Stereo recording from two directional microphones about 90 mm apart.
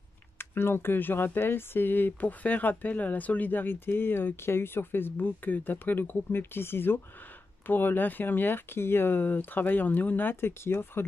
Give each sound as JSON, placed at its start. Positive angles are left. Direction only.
{"t": 0.4, "sound": "speech", "side_deg": 25}